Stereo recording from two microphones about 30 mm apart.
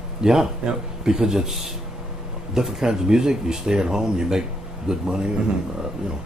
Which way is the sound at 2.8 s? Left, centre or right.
Centre.